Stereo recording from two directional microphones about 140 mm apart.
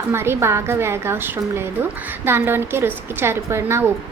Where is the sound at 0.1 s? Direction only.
15° right (ahead or behind).